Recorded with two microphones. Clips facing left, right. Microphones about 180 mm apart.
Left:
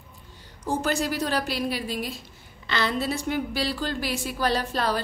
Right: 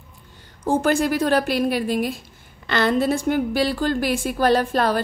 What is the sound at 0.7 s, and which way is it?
A woman's voice, 50° right (ahead or behind).